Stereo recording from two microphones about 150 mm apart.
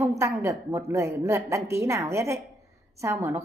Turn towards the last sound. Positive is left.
turn(degrees=-20)  # may be behind; listen again after turning